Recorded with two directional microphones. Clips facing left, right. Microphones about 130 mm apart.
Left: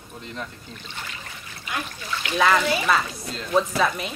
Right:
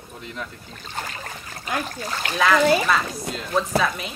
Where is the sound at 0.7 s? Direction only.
40° right (ahead or behind).